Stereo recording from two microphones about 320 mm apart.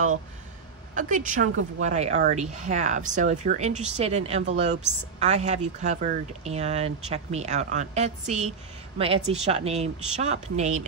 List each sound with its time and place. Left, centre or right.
0.9 s speech: right